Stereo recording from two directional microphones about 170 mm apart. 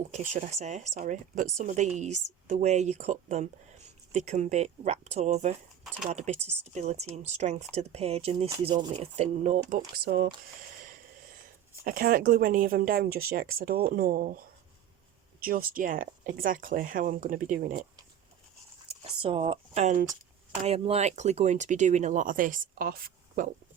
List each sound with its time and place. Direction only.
0.1 s speech: 50° right (ahead or behind)
5.8 s a sound: centre (ahead or behind)
6.1 s speech: 40° right (ahead or behind)
8.6 s speech: 25° right (ahead or behind)
9.0 s speech: 40° right (ahead or behind)
10.0 s speech: 65° right (ahead or behind)
10.6 s a sound: 55° right (ahead or behind)
11.4 s speech: 60° right (ahead or behind)
18.9 s speech: 30° right (ahead or behind); by 23.5 s 60° right (ahead or behind)